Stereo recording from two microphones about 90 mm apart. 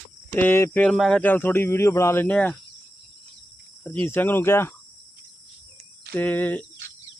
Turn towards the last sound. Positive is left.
turn(degrees=20)  # may be behind; listen again after turning